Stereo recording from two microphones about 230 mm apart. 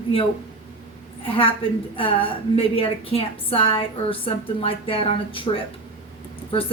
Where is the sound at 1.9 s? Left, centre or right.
Left.